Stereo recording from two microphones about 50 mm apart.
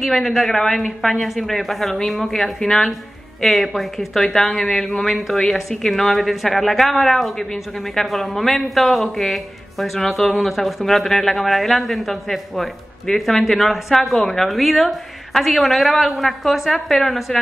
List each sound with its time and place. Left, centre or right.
0.0 s a woman's voice: centre